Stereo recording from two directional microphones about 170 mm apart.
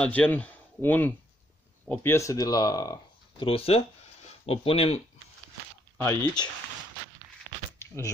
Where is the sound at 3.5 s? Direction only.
35° left (ahead or behind).